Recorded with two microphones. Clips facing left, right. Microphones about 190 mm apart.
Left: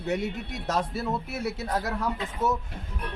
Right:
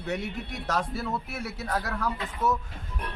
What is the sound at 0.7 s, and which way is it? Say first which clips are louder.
Speech: left 2 dB; 25° left (ahead or behind).